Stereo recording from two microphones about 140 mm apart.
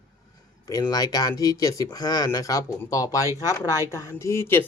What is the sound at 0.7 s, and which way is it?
Speech, 25° left (ahead or behind).